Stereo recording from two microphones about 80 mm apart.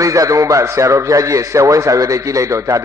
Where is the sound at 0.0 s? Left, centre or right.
Right.